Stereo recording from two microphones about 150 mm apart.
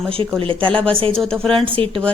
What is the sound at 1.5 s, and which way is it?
Speech, 35° right (ahead or behind).